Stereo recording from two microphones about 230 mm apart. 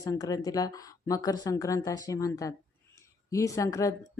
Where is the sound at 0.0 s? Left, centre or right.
Centre.